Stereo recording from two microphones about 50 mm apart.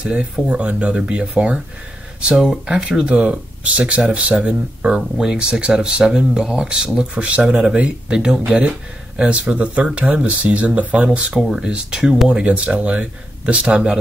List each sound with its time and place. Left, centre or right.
0.0 s speech: right
2.2 s speech: centre
8.5 s speech: right